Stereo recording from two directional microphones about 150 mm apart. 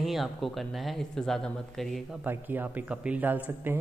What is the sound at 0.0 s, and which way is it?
Speech, centre (ahead or behind).